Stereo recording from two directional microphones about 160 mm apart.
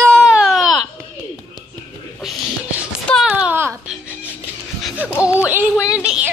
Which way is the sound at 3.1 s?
5° right (ahead or behind).